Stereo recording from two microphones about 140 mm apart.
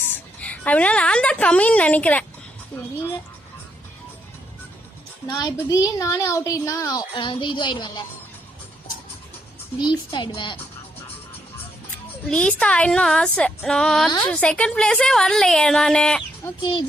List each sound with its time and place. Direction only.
0.4 s a woman's voice: 10° left (ahead or behind)
5.3 s speech: 30° left (ahead or behind)
9.7 s a child's voice: 35° left (ahead or behind)
12.2 s a woman's voice: 5° left (ahead or behind)
16.6 s a child's voice: 35° left (ahead or behind)